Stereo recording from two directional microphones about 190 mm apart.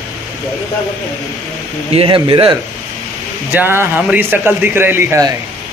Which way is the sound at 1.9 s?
25° right (ahead or behind).